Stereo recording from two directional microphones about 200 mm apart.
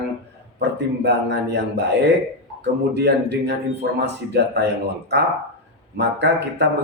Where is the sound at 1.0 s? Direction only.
55° right (ahead or behind).